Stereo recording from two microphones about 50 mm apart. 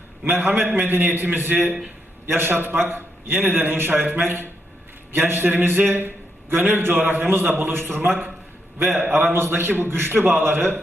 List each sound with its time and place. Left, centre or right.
0.3 s a man's voice: right